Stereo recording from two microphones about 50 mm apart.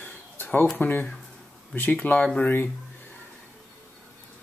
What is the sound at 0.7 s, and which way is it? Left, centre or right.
Speech, left.